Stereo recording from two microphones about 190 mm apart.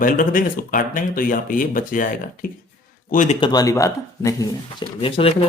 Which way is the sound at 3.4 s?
20° left (ahead or behind).